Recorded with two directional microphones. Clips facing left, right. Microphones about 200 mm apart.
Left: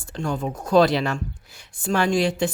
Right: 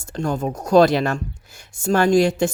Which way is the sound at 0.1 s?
45° right (ahead or behind).